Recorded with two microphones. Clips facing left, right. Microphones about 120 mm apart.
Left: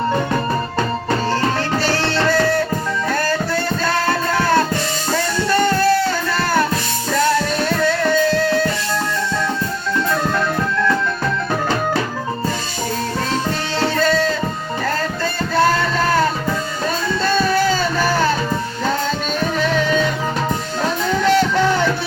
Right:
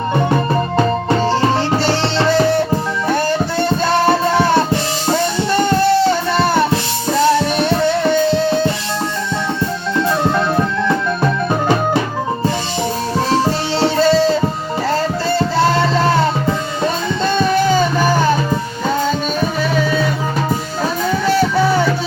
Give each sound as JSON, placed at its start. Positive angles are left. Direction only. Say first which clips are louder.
{"t": 1.4, "sound": "music", "louder": "right 4 dB", "side_deg": -25}
{"t": 13.3, "sound": "music", "louder": "right 5 dB", "side_deg": -30}
{"t": 15.5, "sound": "music", "louder": "left 1 dB", "side_deg": -25}
{"t": 19.4, "sound": "music", "louder": "right 1 dB", "side_deg": -10}